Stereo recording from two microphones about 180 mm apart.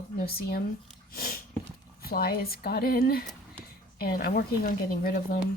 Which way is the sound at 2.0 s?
55° left (ahead or behind).